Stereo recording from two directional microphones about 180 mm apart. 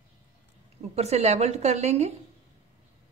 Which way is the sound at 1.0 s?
35° right (ahead or behind).